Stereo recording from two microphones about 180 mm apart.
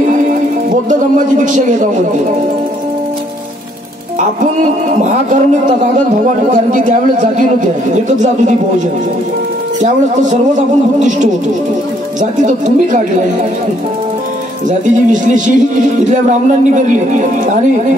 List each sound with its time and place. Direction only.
0.8 s speech: 45° right (ahead or behind)
5.0 s speech: 45° right (ahead or behind)
14.7 s speech: 45° right (ahead or behind)